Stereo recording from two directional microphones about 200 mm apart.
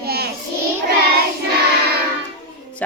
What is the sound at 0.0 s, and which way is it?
Child singing, 50° right (ahead or behind).